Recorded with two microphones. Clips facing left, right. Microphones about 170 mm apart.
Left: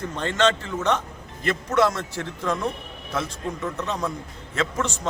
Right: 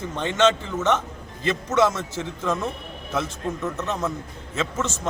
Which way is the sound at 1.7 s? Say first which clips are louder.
Even; 5° right (ahead or behind).